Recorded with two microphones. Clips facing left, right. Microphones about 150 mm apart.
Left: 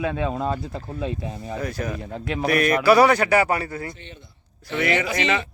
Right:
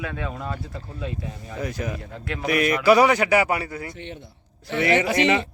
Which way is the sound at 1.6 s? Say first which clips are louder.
Even; 20° right (ahead or behind).